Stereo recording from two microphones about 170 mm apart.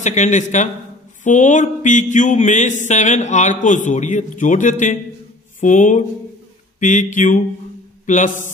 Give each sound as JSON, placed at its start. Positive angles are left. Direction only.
{"t": 0.0, "sound": "speech", "side_deg": 45}